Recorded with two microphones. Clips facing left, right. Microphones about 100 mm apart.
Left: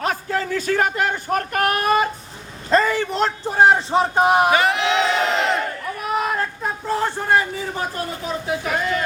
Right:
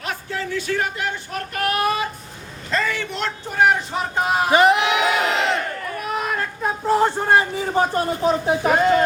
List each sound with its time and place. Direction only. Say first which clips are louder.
0.0 s a man's voice: left 5 dB; 45° left (ahead or behind); by 4.5 s 20° left (ahead or behind)
4.5 s crowd: right 3 dB; 20° right (ahead or behind); by 5.5 s centre (ahead or behind)
6.1 s a sound: left 4 dB; 5° left (ahead or behind)
6.6 s a man's voice: right 4 dB; 15° right (ahead or behind); by 9.0 s 35° right (ahead or behind)